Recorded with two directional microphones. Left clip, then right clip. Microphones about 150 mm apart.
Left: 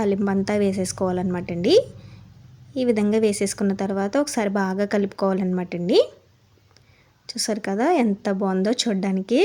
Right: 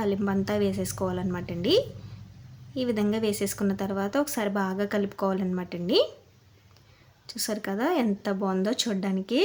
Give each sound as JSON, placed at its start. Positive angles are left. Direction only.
{"t": 0.0, "sound": "a woman's voice", "side_deg": 30}
{"t": 7.3, "sound": "a woman's voice", "side_deg": 25}